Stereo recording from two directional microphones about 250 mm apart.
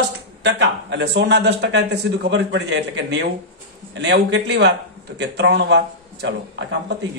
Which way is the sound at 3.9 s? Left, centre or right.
Right.